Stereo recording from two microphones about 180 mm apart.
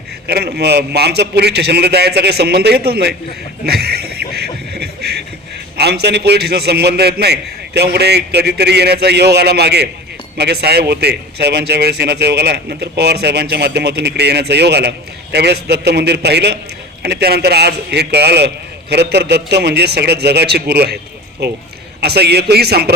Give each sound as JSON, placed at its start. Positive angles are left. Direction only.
{"t": 0.3, "sound": "a man's voice", "side_deg": -65}
{"t": 3.7, "sound": "a sound", "side_deg": -60}
{"t": 5.7, "sound": "a man's voice", "side_deg": -65}